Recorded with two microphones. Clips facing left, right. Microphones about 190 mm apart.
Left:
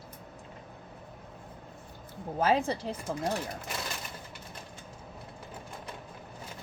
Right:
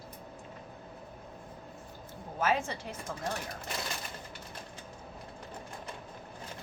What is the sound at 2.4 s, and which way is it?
Speech, 35° left (ahead or behind).